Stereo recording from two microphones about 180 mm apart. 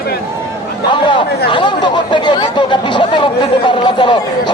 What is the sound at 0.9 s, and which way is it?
Speech, 25° left (ahead or behind).